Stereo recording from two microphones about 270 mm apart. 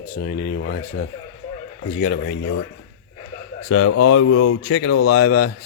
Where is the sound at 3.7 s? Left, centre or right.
Left.